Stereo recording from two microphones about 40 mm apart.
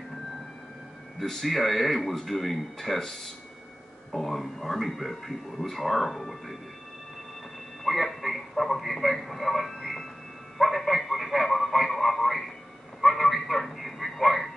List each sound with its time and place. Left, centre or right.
1.2 s speech: centre
4.1 s speech: centre
7.8 s radio: centre
10.6 s a sound: centre